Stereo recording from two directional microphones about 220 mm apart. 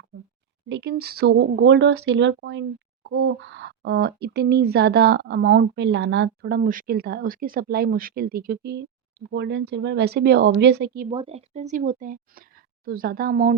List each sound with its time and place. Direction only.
0.7 s speech: 50° right (ahead or behind)
11.1 s speech: 25° right (ahead or behind); by 13.6 s 40° right (ahead or behind)